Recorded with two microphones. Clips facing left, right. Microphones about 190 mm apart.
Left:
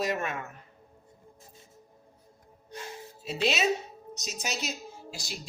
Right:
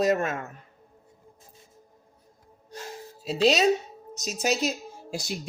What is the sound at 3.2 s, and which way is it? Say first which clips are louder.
Speech: right 7 dB; 35° right (ahead or behind).